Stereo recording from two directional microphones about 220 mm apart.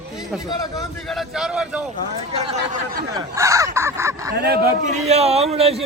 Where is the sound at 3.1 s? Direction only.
15° right (ahead or behind).